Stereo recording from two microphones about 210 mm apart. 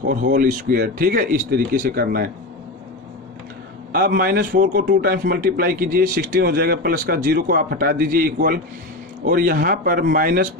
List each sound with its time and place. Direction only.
0.0 s a man's voice: 45° right (ahead or behind)
3.9 s a man's voice: 45° right (ahead or behind)